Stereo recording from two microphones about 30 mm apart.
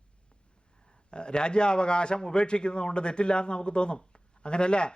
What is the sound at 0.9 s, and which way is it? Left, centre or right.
A man's voice, left.